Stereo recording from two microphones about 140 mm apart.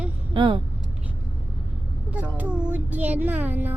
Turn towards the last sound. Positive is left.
turn(degrees=-10)  # may be behind; listen again after turning